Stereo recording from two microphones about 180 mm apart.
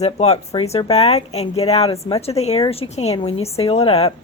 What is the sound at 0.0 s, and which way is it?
A woman's voice, 35° left (ahead or behind).